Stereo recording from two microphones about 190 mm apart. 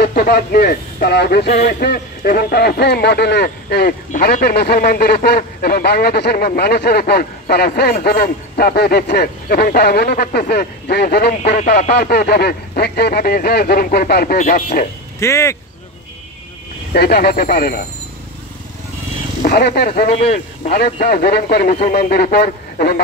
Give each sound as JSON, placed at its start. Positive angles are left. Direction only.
{"t": 0.0, "sound": "speech", "side_deg": 55}
{"t": 15.1, "sound": "speech", "side_deg": 15}
{"t": 16.9, "sound": "speech", "side_deg": 55}
{"t": 19.4, "sound": "speech", "side_deg": 55}
{"t": 20.2, "sound": "speech", "side_deg": 35}
{"t": 20.7, "sound": "speech", "side_deg": 55}